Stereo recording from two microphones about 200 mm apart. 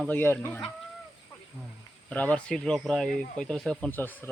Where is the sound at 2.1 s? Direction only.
5° left (ahead or behind).